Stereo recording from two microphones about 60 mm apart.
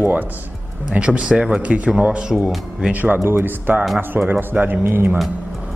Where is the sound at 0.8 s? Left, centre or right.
Centre.